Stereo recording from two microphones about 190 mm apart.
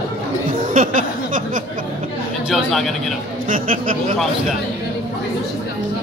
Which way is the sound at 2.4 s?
Centre (ahead or behind).